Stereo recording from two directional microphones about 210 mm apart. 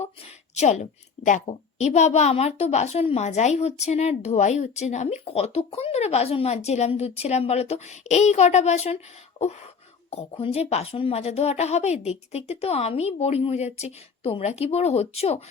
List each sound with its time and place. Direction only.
0.5 s a woman's voice: 35° left (ahead or behind)
9.4 s a sound: 30° left (ahead or behind)
10.1 s a woman's voice: 25° left (ahead or behind)